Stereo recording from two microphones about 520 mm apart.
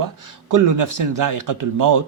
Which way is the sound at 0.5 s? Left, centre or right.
Right.